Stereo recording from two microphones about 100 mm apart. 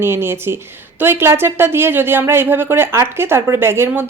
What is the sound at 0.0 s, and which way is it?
Speech, 25° right (ahead or behind).